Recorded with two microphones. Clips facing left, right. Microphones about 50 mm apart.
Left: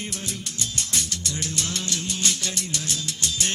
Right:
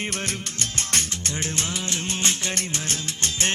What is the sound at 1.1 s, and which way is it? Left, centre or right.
Music, right.